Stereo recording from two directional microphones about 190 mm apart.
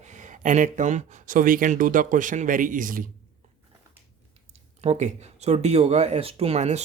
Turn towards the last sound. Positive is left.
turn(degrees=-35)  # may be behind; listen again after turning